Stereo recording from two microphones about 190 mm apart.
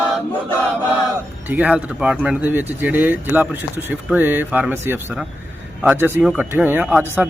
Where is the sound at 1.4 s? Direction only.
10° right (ahead or behind).